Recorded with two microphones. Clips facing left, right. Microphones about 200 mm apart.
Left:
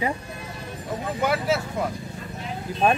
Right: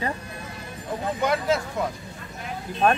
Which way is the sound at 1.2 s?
5° left (ahead or behind).